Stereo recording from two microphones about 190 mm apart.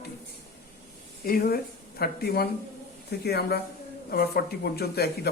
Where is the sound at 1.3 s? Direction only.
50° left (ahead or behind).